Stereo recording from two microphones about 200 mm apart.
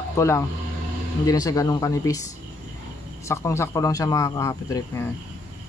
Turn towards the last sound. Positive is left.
turn(degrees=15)  # may be behind; listen again after turning